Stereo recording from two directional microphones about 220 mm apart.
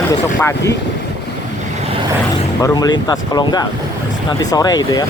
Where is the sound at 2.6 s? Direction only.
15° left (ahead or behind).